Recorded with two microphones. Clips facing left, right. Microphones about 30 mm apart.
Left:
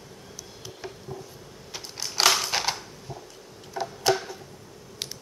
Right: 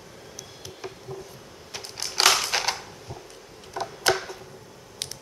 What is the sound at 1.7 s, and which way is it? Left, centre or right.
Typing, centre.